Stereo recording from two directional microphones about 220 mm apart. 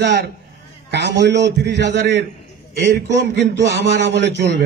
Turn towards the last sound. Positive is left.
turn(degrees=-55)  # may be behind; listen again after turning